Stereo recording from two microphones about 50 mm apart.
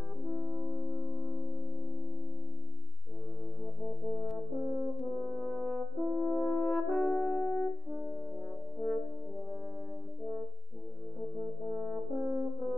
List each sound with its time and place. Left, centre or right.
0.3 s music: centre
4.1 s french horn: centre
11.1 s french horn: centre